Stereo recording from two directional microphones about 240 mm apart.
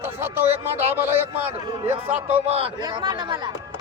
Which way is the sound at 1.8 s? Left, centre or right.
Centre.